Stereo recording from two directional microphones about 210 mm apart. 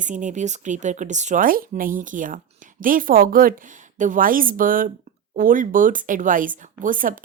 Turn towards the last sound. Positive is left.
turn(degrees=-40)  # may be behind; listen again after turning